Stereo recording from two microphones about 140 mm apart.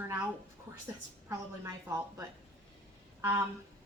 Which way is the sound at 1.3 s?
20° right (ahead or behind).